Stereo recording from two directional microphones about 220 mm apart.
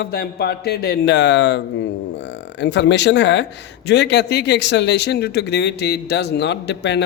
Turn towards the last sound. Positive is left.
turn(degrees=50)  # may be behind; listen again after turning